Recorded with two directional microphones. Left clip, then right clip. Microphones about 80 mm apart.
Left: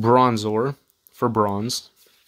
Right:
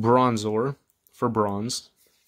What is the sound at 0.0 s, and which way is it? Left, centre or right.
Speech, centre.